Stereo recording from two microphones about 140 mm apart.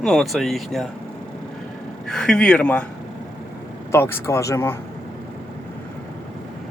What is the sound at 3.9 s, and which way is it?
Speech, 20° left (ahead or behind).